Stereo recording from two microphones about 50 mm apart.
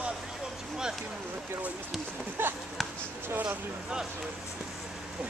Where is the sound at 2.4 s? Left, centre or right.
Right.